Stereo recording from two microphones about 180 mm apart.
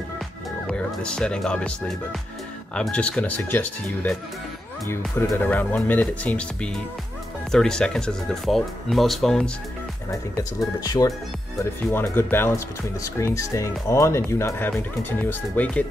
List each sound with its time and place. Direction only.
0.7 s speech: 5° left (ahead or behind)
2.7 s speech: 5° left (ahead or behind)
5.3 s speech: 10° left (ahead or behind)
10.3 s speech: 20° left (ahead or behind)